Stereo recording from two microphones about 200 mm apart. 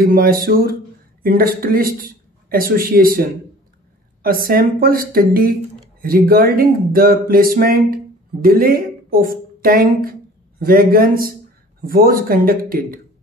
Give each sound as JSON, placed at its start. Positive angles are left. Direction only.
{"t": 0.0, "sound": "speech", "side_deg": -45}